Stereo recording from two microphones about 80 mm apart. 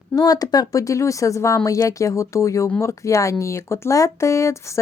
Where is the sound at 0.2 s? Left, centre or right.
Left.